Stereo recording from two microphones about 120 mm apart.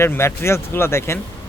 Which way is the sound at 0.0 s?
20° left (ahead or behind).